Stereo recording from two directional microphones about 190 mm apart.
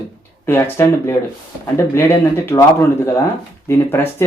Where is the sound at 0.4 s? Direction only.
15° left (ahead or behind).